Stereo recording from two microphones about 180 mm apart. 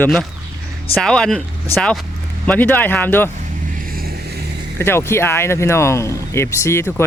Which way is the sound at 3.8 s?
55° right (ahead or behind).